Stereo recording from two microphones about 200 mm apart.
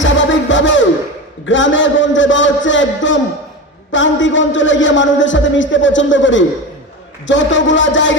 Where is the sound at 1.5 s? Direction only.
70° left (ahead or behind).